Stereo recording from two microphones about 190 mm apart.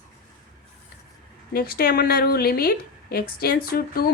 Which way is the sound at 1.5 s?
50° left (ahead or behind).